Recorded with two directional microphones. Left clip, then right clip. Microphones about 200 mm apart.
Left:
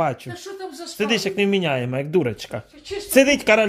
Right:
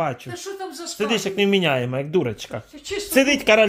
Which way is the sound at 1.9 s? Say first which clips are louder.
Left 1 dB; 10° left (ahead or behind).